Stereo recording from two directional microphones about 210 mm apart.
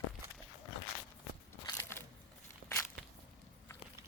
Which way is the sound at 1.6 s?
20° left (ahead or behind).